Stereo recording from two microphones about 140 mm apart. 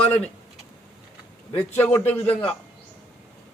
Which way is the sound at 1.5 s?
10° left (ahead or behind).